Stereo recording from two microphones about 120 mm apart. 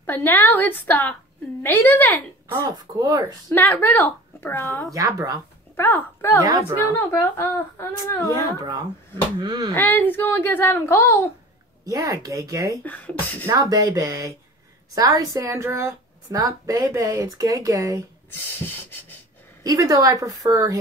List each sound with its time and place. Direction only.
0.0 s a child's voice: 15° left (ahead or behind)
2.5 s a woman's voice: 30° right (ahead or behind)
3.4 s a child's voice: 15° left (ahead or behind)
4.9 s a woman's voice: 30° right (ahead or behind)
5.8 s a child's voice: 20° left (ahead or behind)
8.5 s speech: 35° right (ahead or behind)
9.8 s a child's voice: 15° left (ahead or behind)
11.8 s a woman's voice: 30° right (ahead or behind)
12.8 s a child's voice: 15° left (ahead or behind)
13.5 s a woman's voice: 30° right (ahead or behind)
18.7 s rub: 15° left (ahead or behind)
19.6 s a woman's voice: 30° right (ahead or behind)